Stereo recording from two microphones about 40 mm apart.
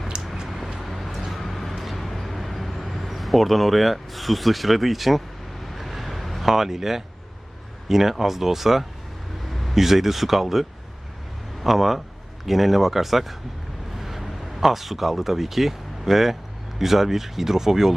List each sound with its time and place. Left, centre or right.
0.4 s vehicle: centre
7.9 s speech: centre